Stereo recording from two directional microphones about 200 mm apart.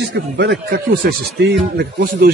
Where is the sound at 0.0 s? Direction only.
60° right (ahead or behind).